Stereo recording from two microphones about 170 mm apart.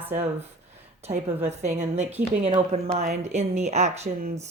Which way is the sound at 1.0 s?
40° right (ahead or behind).